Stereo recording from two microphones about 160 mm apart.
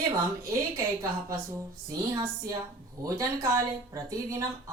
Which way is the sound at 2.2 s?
20° right (ahead or behind).